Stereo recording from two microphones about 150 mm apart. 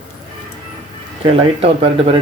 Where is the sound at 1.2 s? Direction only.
35° right (ahead or behind).